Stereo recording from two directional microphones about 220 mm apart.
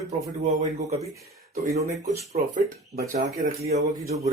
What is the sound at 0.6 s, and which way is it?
Speech, 30° right (ahead or behind).